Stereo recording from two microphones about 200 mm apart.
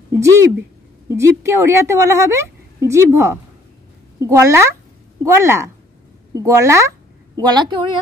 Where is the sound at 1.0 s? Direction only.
15° right (ahead or behind).